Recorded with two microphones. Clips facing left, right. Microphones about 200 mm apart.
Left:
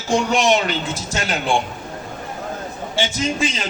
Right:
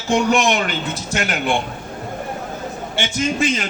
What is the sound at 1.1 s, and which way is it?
Speech, 60° right (ahead or behind).